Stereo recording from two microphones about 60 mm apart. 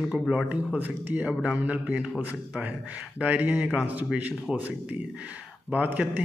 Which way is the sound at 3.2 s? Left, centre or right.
Right.